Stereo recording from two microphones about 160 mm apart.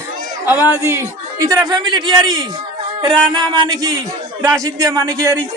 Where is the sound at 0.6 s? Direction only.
20° left (ahead or behind).